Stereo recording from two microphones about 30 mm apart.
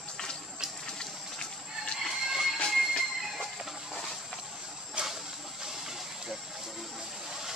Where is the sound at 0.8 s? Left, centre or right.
Left.